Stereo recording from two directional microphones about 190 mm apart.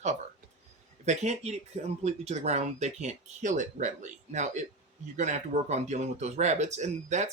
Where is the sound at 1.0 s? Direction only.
35° right (ahead or behind).